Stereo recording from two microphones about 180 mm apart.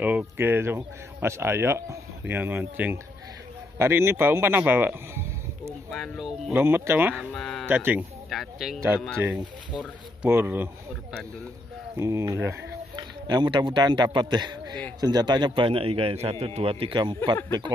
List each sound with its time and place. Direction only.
0.0 s speech: 10° right (ahead or behind)
5.9 s speech: centre (ahead or behind)
6.5 s speech: 10° right (ahead or behind)
7.2 s speech: centre (ahead or behind)
7.6 s speech: 10° right (ahead or behind)
12.0 s a man's voice: 15° right (ahead or behind)